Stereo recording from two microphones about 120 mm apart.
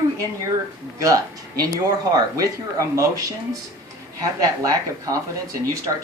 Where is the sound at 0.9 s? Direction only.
30° right (ahead or behind).